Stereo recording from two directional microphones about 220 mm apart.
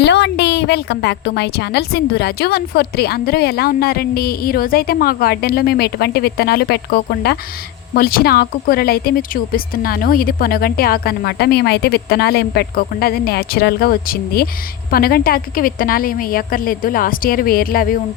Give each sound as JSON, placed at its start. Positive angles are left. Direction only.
{"t": 0.0, "sound": "a woman's voice", "side_deg": 50}